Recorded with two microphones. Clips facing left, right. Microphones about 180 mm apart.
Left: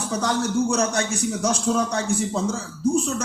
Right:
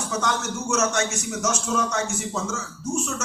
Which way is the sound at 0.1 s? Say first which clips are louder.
Left 4 dB; 35° left (ahead or behind).